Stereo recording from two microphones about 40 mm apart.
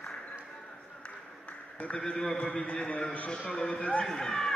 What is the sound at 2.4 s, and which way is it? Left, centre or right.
Speech, left.